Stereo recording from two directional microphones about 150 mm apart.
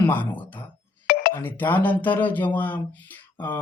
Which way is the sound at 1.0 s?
75° left (ahead or behind).